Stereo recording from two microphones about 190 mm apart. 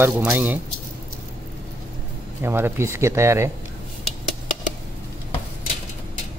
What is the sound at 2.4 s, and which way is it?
Speech, 15° right (ahead or behind).